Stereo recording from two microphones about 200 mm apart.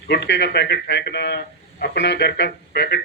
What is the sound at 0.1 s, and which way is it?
Speech, 60° left (ahead or behind).